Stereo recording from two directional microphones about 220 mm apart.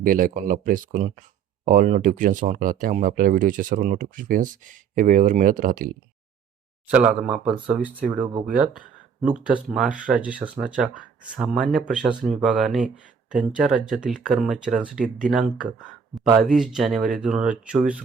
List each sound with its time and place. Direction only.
0.0 s speech: 40° right (ahead or behind)
6.8 s speech: 5° right (ahead or behind)